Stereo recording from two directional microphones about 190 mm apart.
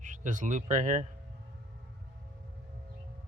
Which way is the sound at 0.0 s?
40° right (ahead or behind).